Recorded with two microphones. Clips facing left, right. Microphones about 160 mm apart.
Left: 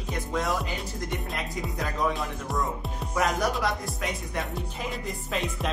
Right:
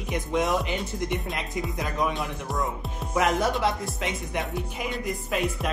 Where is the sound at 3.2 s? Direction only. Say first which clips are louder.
Right 3 dB; 25° right (ahead or behind).